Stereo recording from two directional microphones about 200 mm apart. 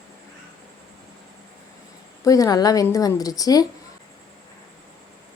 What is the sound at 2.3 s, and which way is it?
A woman's voice, 20° left (ahead or behind).